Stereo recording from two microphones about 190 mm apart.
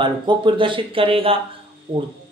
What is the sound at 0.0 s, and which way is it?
A man's voice, 25° right (ahead or behind).